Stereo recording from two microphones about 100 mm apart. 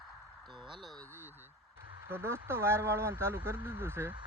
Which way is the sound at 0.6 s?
50° right (ahead or behind).